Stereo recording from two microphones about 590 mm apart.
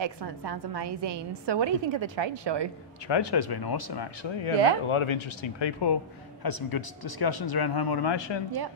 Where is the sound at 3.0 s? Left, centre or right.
Left.